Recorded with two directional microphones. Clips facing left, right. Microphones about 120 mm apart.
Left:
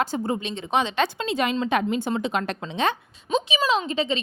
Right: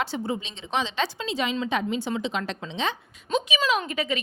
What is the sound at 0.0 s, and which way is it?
A woman's voice, 45° left (ahead or behind).